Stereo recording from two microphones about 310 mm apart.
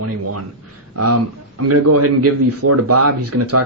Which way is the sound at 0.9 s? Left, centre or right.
Right.